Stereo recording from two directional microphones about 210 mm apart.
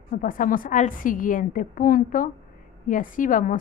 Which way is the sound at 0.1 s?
40° left (ahead or behind).